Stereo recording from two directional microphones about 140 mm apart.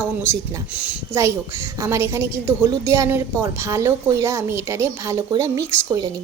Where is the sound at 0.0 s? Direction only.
15° right (ahead or behind).